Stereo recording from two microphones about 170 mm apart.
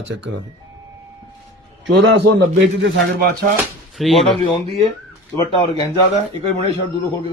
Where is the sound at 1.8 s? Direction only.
90° right.